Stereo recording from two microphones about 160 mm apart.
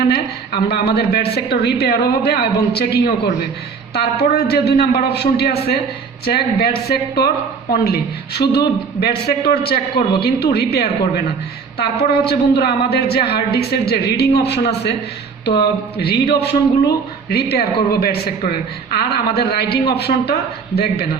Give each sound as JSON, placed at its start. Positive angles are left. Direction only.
{"t": 0.1, "sound": "a woman's voice", "side_deg": 85}
{"t": 6.2, "sound": "a man's voice", "side_deg": 75}